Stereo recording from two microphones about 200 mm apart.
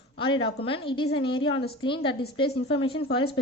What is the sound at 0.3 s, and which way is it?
Speech, 90° left.